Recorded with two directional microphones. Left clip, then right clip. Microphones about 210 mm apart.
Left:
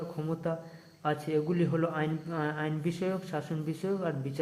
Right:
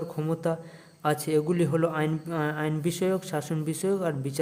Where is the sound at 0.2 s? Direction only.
30° right (ahead or behind).